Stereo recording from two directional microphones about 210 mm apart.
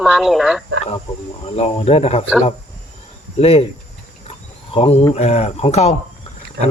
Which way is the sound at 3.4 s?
30° left (ahead or behind).